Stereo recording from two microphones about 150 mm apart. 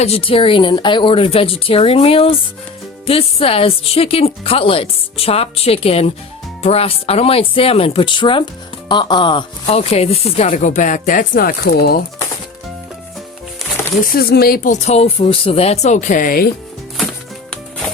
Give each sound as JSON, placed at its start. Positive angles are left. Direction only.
{"t": 0.0, "sound": "speech", "side_deg": 40}
{"t": 14.0, "sound": "speech", "side_deg": 80}
{"t": 14.7, "sound": "speech", "side_deg": 50}
{"t": 17.5, "sound": "music", "side_deg": 5}